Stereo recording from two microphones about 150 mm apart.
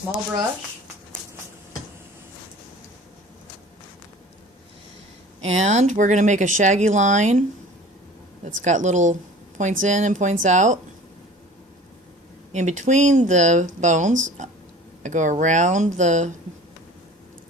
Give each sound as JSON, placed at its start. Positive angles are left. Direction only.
{"t": 5.4, "sound": "speech", "side_deg": -50}
{"t": 8.4, "sound": "speech", "side_deg": -55}
{"t": 12.5, "sound": "speech", "side_deg": -55}